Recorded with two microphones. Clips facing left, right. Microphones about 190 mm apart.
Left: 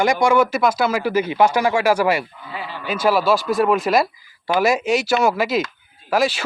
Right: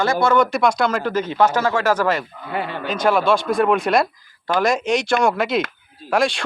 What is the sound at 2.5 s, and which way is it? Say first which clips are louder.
Speech: right 6 dB; 60° right (ahead or behind).